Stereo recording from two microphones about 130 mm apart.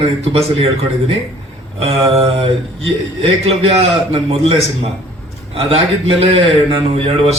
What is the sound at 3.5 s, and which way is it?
A man's voice, 50° right (ahead or behind).